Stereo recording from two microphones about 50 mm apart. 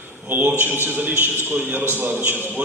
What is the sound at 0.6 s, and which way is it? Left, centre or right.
A man's voice, right.